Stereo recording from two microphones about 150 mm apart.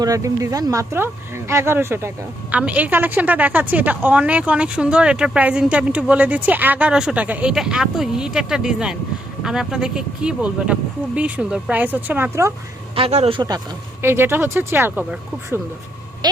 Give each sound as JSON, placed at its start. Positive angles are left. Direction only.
{"t": 0.0, "sound": "speech", "side_deg": -20}
{"t": 13.0, "sound": "speech", "side_deg": -45}
{"t": 14.0, "sound": "speech", "side_deg": -15}
{"t": 16.2, "sound": "a sound", "side_deg": -30}